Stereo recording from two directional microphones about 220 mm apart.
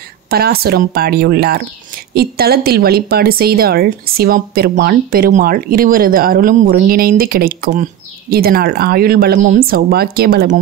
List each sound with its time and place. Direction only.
0.3 s speech: 45° right (ahead or behind)